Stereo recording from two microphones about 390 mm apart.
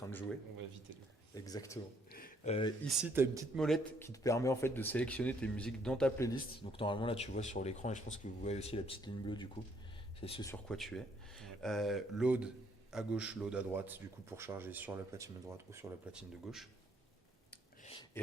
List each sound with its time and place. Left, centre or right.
1.5 s speech: centre
2.1 s a sound: centre
2.8 s a man's voice: centre